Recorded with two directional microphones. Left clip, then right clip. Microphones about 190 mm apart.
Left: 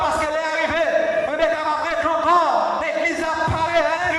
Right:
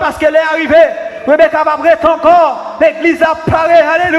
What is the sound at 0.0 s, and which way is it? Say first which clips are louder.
A man's voice: right 10 dB; 55° right (ahead or behind).